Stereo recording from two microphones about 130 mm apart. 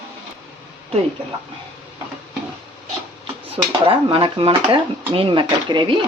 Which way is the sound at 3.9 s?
40° right (ahead or behind).